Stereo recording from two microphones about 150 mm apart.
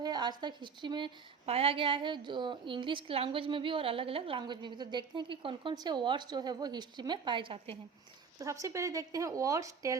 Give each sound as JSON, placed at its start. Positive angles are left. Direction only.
{"t": 0.0, "sound": "a woman's voice", "side_deg": -25}
{"t": 8.4, "sound": "speech", "side_deg": -20}